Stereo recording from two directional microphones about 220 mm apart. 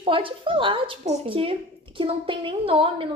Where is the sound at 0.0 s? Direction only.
25° right (ahead or behind).